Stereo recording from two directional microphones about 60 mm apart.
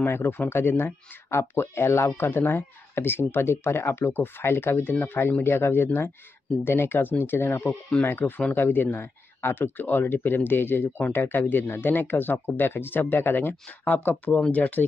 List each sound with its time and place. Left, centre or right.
0.0 s speech: left